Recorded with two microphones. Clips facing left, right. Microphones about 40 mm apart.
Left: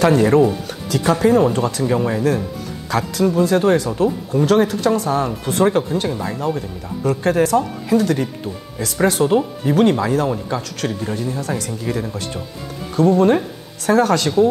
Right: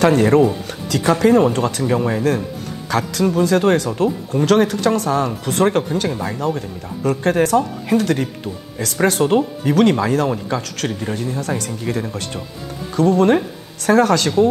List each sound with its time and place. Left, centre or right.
0.0 s speech: right
0.7 s music: right
1.2 s speech: right
6.0 s speech: right